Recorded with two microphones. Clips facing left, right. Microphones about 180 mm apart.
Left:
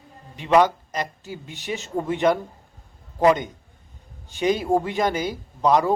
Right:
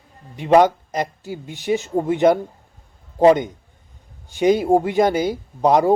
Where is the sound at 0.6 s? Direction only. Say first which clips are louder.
Right 4 dB; 20° right (ahead or behind).